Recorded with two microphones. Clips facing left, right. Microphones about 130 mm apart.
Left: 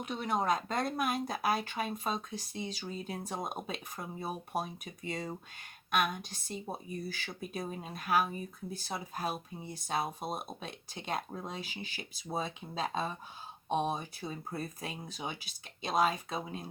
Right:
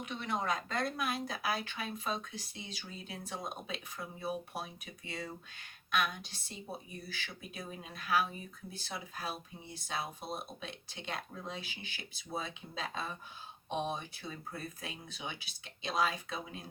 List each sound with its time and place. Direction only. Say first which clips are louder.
0.0 s speech: left 4 dB; 40° left (ahead or behind)